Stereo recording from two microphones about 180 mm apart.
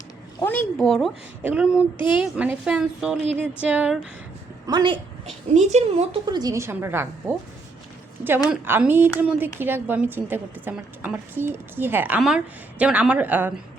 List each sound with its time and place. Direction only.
0.3 s a woman's voice: 10° left (ahead or behind); by 3.9 s 5° right (ahead or behind)
4.6 s a woman's voice: 25° right (ahead or behind)
5.5 s speech: 35° right (ahead or behind)
6.2 s a woman's voice: 20° right (ahead or behind)
8.4 s a woman's voice: 10° right (ahead or behind)